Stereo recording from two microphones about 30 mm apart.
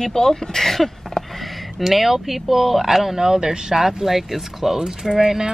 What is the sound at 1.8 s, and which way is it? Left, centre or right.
Speech, centre.